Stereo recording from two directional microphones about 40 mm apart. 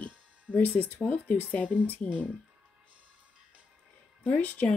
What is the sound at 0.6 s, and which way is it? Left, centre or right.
Speech, left.